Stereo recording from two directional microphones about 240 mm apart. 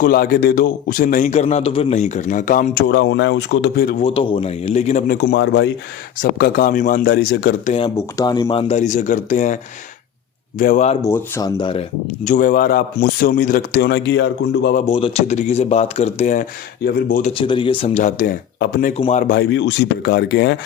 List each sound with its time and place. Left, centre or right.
0.0 s a man's voice: left
4.0 s speech: left
6.4 s a man's voice: left
7.7 s speech: left
10.6 s a man's voice: left
11.0 s a man's voice: centre; by 14.8 s left
14.8 s speech: left
17.3 s a man's voice: left
18.9 s speech: left